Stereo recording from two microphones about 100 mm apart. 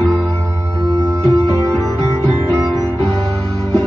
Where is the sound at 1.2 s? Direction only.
35° right (ahead or behind).